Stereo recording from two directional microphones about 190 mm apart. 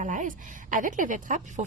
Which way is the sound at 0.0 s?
40° right (ahead or behind).